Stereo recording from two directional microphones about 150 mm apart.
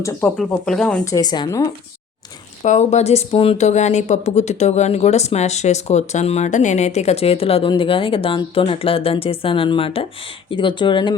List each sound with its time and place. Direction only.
0.0 s speech: 15° left (ahead or behind)
1.0 s speech: 25° left (ahead or behind)
2.6 s speech: 50° left (ahead or behind); by 11.1 s 30° left (ahead or behind)